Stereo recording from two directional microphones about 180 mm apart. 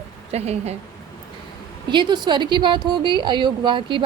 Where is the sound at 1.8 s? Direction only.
25° right (ahead or behind).